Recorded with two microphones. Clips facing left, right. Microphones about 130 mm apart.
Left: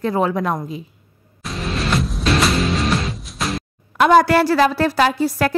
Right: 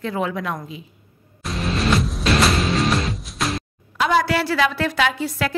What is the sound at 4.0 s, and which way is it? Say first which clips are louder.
A woman's voice: left 6 dB; 45° left (ahead or behind).